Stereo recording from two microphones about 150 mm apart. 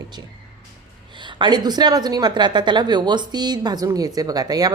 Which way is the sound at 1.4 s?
30° right (ahead or behind).